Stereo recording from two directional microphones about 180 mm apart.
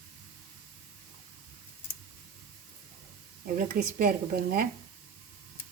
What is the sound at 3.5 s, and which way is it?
A woman's voice, 55° right (ahead or behind).